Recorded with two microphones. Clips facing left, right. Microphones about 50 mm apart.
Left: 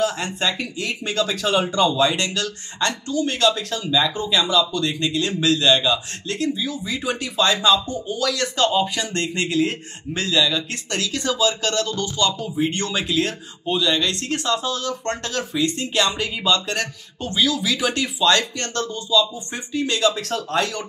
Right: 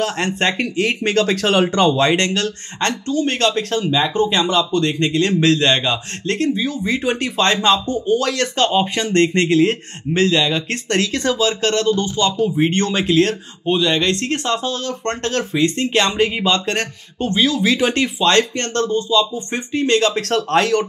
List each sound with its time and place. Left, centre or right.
0.0 s speech: right